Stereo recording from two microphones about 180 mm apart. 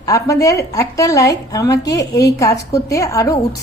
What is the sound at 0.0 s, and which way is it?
A woman's voice, 20° left (ahead or behind).